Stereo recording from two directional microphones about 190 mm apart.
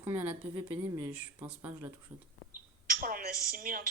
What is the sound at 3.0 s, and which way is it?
Speech, 50° right (ahead or behind).